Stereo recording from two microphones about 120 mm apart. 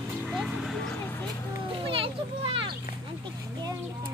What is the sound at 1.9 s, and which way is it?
Children playing, 50° right (ahead or behind).